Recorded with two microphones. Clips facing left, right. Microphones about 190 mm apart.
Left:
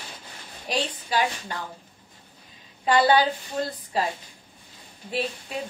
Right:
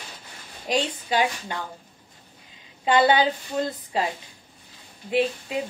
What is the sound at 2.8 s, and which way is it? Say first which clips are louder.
A woman's voice: right 1 dB; 20° right (ahead or behind).